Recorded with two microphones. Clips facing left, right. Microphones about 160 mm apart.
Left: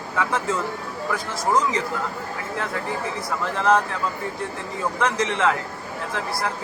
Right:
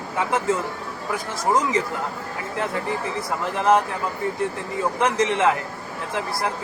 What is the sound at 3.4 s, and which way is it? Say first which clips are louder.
Speech: right 1 dB; 20° right (ahead or behind).